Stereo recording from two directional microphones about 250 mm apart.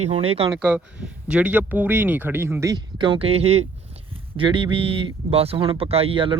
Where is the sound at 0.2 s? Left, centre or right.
Right.